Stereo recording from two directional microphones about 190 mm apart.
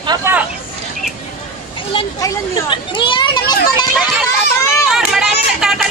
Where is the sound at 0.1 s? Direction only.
10° right (ahead or behind).